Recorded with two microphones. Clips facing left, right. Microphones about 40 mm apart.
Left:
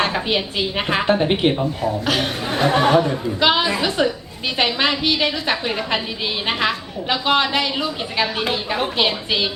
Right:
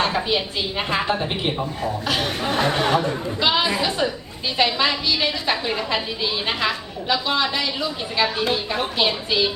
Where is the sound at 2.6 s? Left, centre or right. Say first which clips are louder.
Left 7 dB; left.